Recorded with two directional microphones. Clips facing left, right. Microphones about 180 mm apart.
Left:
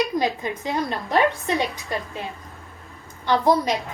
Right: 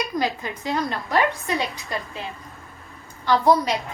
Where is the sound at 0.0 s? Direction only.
20° left (ahead or behind).